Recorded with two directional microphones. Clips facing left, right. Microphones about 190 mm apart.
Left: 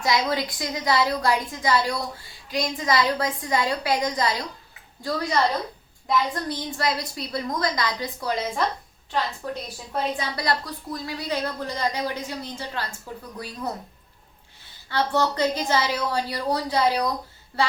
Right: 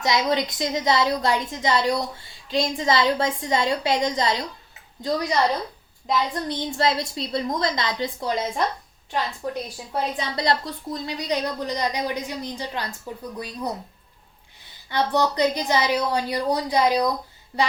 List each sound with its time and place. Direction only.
0.0 s a woman's voice: 20° right (ahead or behind)
9.9 s a woman's voice: 20° right (ahead or behind)
14.6 s a woman's voice: 15° right (ahead or behind)